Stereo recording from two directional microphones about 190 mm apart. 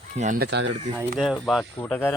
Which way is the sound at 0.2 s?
40° right (ahead or behind).